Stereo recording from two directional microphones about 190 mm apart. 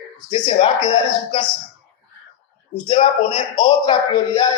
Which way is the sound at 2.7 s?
25° left (ahead or behind).